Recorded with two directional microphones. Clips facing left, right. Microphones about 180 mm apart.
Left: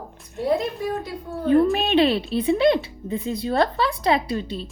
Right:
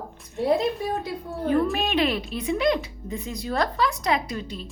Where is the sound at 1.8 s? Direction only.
30° left (ahead or behind).